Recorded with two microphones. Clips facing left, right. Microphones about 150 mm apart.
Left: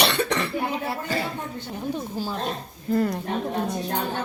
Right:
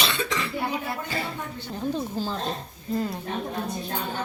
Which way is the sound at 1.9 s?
10° left (ahead or behind).